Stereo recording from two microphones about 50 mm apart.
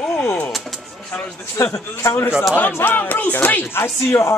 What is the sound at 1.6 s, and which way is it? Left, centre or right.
Speech, left.